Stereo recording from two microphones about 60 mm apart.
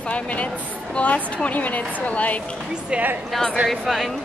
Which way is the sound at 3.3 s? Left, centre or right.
Centre.